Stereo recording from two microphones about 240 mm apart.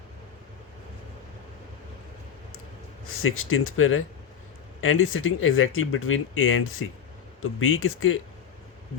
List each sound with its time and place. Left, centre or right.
3.1 s speech: left